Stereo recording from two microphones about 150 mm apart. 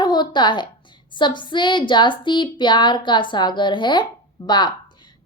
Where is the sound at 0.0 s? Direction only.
30° left (ahead or behind).